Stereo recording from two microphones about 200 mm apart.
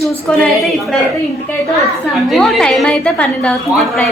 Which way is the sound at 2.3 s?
5° left (ahead or behind).